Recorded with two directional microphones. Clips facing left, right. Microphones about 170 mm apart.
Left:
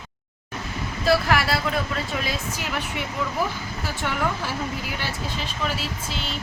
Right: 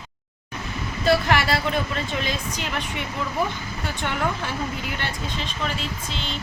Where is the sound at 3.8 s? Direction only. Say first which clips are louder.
Even; 5° left (ahead or behind).